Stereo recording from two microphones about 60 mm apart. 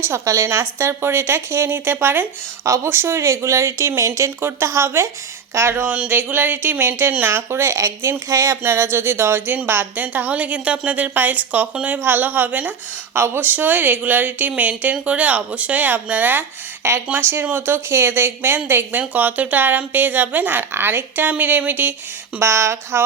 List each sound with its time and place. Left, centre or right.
0.0 s a woman's voice: right
2.6 s speech: right
4.4 s a woman's voice: right
5.5 s speech: right
8.6 s a woman's voice: right
9.6 s a woman's voice: right
13.1 s a woman's voice: right
16.8 s a woman's voice: right
22.4 s a woman's voice: right